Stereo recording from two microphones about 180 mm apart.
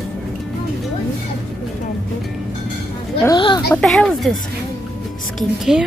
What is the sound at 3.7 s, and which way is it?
Speech, 5° left (ahead or behind).